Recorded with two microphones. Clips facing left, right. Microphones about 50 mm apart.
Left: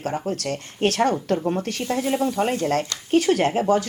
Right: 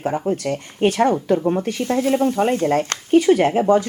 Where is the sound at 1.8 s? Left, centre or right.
Right.